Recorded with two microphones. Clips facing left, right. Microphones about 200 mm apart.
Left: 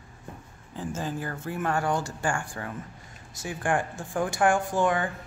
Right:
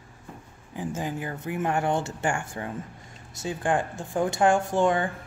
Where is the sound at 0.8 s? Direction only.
15° right (ahead or behind).